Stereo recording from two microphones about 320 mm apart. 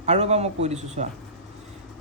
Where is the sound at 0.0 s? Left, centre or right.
Right.